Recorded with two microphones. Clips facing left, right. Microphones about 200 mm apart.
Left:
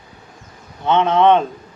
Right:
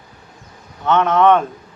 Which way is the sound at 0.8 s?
25° left (ahead or behind).